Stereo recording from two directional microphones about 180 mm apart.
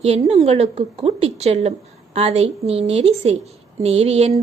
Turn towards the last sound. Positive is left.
turn(degrees=-35)  # may be behind; listen again after turning